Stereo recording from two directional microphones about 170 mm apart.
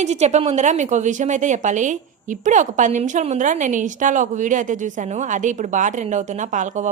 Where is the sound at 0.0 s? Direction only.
40° right (ahead or behind).